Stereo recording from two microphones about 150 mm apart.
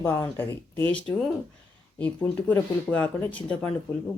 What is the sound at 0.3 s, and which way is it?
Speech, 15° left (ahead or behind).